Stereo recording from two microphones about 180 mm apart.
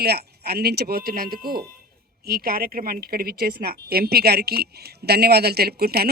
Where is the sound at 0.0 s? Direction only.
60° right (ahead or behind).